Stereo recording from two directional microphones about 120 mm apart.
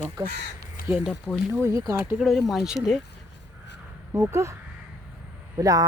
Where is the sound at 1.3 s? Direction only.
15° left (ahead or behind).